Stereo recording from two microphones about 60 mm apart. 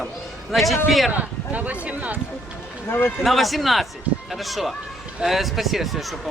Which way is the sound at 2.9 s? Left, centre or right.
Left.